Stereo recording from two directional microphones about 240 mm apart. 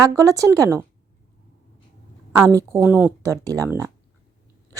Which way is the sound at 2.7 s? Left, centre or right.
Centre.